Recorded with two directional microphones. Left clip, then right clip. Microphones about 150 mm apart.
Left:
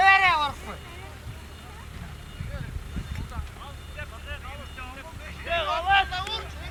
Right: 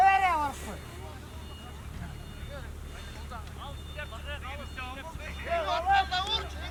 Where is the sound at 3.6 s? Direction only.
10° right (ahead or behind).